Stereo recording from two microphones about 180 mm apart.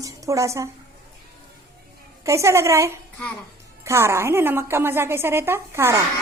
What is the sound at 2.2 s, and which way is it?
A woman's voice, 15° right (ahead or behind).